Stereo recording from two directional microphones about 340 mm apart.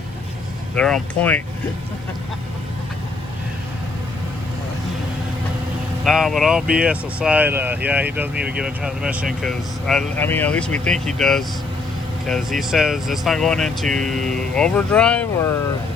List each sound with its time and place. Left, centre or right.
0.8 s speech: centre
6.1 s speech: centre